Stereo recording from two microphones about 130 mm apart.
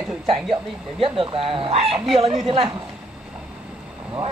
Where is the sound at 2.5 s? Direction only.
45° right (ahead or behind).